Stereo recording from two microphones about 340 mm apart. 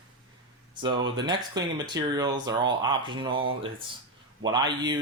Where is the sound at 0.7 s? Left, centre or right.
Centre.